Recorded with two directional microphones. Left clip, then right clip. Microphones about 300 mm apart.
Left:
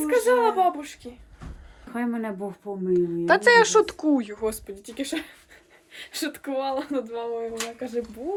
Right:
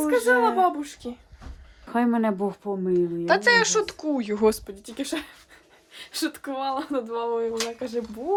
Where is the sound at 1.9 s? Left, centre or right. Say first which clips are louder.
Right 6 dB; centre.